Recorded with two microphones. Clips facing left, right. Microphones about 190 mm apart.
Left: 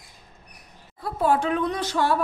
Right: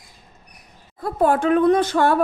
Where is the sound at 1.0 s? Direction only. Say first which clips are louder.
Right 4 dB; 50° right (ahead or behind).